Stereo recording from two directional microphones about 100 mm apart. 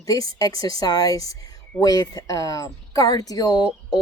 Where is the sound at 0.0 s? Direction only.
35° left (ahead or behind).